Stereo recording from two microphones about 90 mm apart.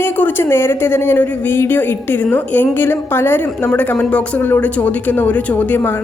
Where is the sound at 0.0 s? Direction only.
20° left (ahead or behind).